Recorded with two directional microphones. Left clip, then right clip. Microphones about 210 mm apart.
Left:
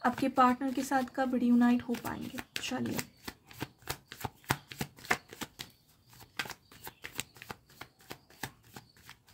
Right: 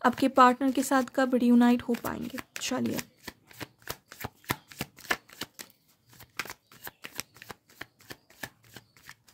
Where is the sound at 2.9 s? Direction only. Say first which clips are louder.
Right 2 dB; 15° right (ahead or behind).